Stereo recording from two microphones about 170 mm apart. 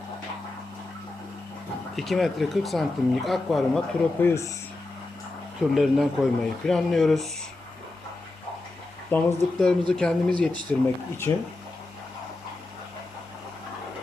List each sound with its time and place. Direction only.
2.0 s speech: centre (ahead or behind)
4.2 s speech: 15° left (ahead or behind)
5.7 s speech: centre (ahead or behind)
9.1 s speech: 5° left (ahead or behind)
10.7 s speech: 15° left (ahead or behind)